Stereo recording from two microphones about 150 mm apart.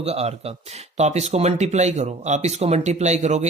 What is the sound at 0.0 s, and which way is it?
Speech, 45° right (ahead or behind).